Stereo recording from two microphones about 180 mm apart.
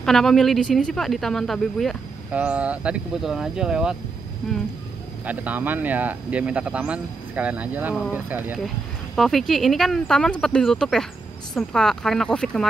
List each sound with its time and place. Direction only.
0.0 s speech: centre (ahead or behind)
9.1 s speech: centre (ahead or behind)